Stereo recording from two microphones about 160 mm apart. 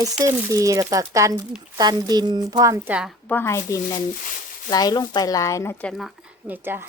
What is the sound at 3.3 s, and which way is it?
Speech, 15° left (ahead or behind).